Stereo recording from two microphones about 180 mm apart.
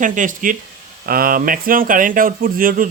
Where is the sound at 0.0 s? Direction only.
45° right (ahead or behind).